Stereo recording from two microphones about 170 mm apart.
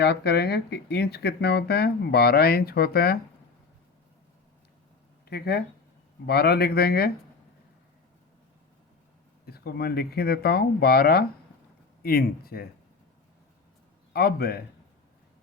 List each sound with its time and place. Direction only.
0.0 s speech: 75° left (ahead or behind)
5.3 s speech: 70° left (ahead or behind)
9.5 s speech: 65° left (ahead or behind)
14.1 s speech: 65° left (ahead or behind)